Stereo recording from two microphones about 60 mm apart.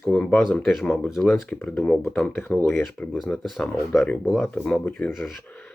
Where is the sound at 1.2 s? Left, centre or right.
Centre.